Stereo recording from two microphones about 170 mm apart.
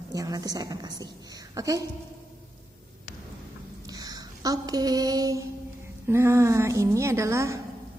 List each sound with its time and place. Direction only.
0.1 s a woman's voice: 20° right (ahead or behind)
3.8 s a sound: 20° right (ahead or behind)
6.0 s a woman's voice: 15° right (ahead or behind)